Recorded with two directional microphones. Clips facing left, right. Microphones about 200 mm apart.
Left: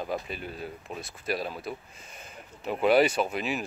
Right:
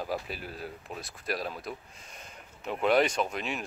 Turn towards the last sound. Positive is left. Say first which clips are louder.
# left 3 dB
turn(degrees=5)  # may be behind; listen again after turning